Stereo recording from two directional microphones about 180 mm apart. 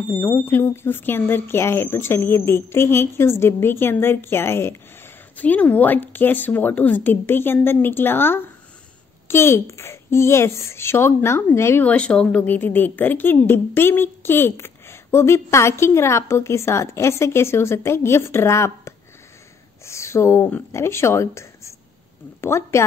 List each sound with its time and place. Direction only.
0.1 s a woman's voice: 15° left (ahead or behind)